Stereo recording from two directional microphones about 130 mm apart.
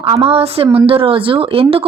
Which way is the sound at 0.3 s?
50° right (ahead or behind).